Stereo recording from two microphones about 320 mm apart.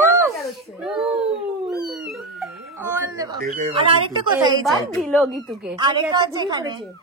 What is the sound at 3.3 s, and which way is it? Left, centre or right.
Speech, right.